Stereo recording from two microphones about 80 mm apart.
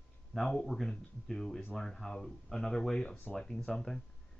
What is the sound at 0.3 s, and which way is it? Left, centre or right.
Speech, centre.